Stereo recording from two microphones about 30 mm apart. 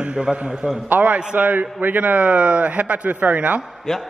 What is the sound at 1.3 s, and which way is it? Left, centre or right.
Speech, right.